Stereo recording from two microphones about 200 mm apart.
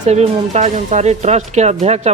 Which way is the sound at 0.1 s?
35° right (ahead or behind).